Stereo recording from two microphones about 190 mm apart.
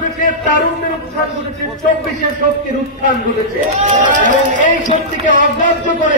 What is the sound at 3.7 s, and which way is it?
Speech, 40° right (ahead or behind).